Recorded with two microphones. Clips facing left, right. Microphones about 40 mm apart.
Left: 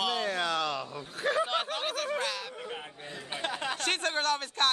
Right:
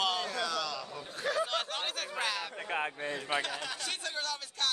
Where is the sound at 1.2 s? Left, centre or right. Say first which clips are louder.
Left 3 dB; left.